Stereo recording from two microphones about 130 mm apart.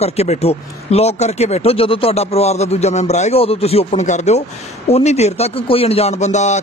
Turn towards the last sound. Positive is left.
turn(degrees=65)  # may be behind; listen again after turning